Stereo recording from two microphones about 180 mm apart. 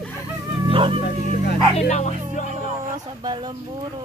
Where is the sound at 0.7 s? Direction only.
30° right (ahead or behind).